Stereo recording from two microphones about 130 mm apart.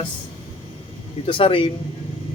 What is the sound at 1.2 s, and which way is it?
Speech, 45° left (ahead or behind).